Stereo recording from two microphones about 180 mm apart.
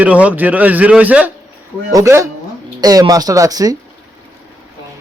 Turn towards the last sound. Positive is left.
turn(degrees=-20)  # may be behind; listen again after turning